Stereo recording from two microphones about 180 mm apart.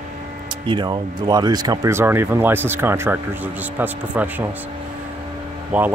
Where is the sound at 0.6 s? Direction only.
25° right (ahead or behind); by 4.4 s 10° right (ahead or behind).